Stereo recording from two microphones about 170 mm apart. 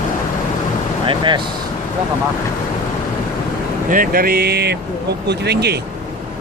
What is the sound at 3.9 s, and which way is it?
Speech, 55° right (ahead or behind).